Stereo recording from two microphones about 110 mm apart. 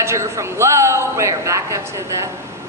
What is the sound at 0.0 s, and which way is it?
A woman's voice, 25° right (ahead or behind).